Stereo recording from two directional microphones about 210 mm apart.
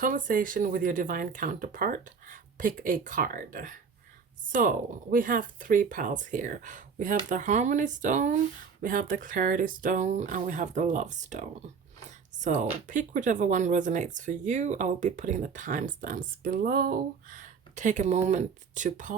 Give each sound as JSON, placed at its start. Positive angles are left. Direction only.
{"t": 0.0, "sound": "speech", "side_deg": -40}